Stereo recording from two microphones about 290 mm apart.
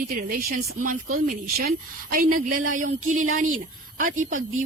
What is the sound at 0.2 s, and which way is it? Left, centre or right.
Speech, right.